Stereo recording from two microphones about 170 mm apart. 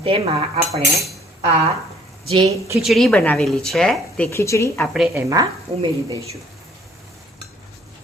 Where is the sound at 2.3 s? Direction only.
35° right (ahead or behind).